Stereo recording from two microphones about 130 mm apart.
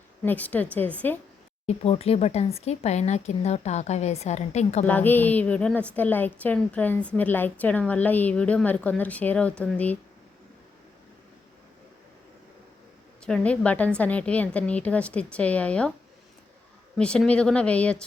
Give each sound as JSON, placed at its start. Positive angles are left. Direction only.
{"t": 0.3, "sound": "a woman's voice", "side_deg": 10}
{"t": 1.6, "sound": "speech", "side_deg": 50}
{"t": 4.9, "sound": "a woman's voice", "side_deg": 15}
{"t": 13.2, "sound": "a woman's voice", "side_deg": 10}
{"t": 17.0, "sound": "a woman's voice", "side_deg": 5}